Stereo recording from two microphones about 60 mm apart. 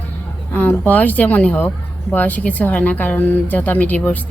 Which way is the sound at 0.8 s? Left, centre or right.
Left.